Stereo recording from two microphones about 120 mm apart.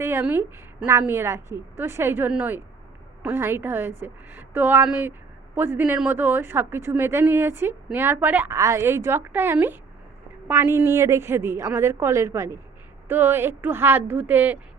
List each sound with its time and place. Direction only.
0.0 s a woman's voice: 20° right (ahead or behind)
8.5 s a woman's voice: 25° right (ahead or behind)